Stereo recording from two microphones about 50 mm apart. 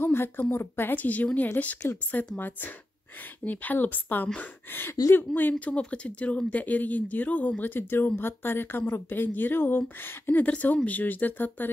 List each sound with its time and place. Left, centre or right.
0.0 s speech: left
10.4 s speech: left